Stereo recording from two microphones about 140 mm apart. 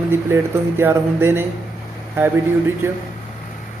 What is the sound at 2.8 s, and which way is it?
Speech, 20° right (ahead or behind).